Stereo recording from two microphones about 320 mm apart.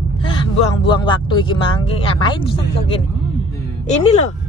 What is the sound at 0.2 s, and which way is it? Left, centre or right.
Speech, centre.